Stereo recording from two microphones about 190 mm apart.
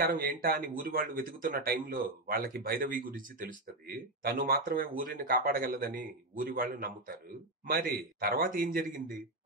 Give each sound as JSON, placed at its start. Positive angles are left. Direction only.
{"t": 0.0, "sound": "speech", "side_deg": -50}